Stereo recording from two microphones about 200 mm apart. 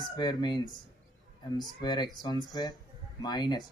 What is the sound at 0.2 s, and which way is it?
Speech, 20° left (ahead or behind).